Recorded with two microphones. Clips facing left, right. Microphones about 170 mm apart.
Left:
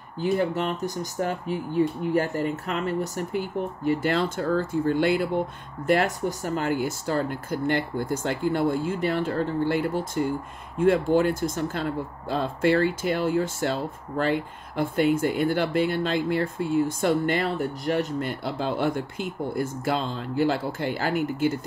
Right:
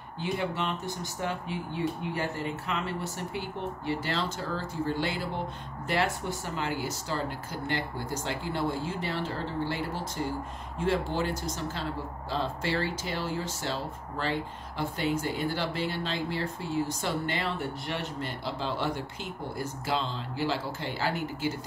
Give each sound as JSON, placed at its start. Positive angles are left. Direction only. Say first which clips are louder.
{"t": 0.2, "sound": "speech", "louder": "left 7 dB", "side_deg": 45}